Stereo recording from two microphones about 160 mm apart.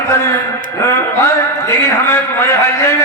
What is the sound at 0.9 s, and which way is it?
A man's voice, 15° left (ahead or behind).